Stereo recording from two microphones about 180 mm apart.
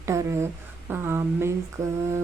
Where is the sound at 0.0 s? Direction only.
15° right (ahead or behind).